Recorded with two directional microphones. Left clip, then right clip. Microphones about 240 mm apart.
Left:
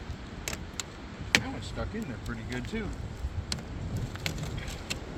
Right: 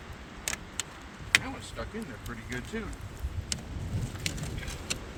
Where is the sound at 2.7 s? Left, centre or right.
Left.